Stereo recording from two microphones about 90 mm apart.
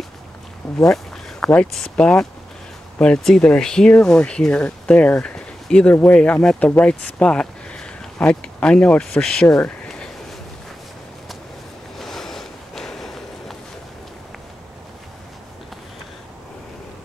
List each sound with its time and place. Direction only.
0.6 s speech: 5° left (ahead or behind)
12.0 s walk: 5° left (ahead or behind)